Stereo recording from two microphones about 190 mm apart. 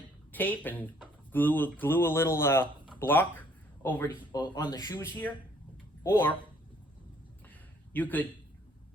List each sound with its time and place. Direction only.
0.3 s speech: 10° left (ahead or behind)
4.4 s speech: 20° left (ahead or behind)
7.9 s speech: 10° left (ahead or behind)